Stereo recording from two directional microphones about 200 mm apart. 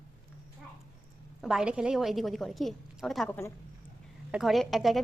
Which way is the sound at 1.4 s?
5° right (ahead or behind).